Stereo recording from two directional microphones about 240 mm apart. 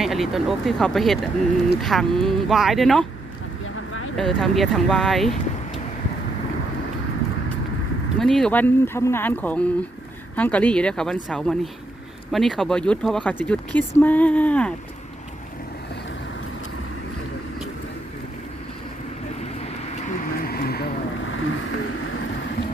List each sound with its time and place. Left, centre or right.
0.0 s speech: centre
4.2 s speech: centre
8.2 s speech: centre
20.4 s vehicle: left